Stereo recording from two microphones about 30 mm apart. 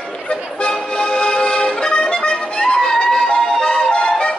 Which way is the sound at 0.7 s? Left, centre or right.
Left.